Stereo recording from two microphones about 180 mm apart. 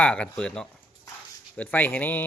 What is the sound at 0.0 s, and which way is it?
Speech, 5° left (ahead or behind).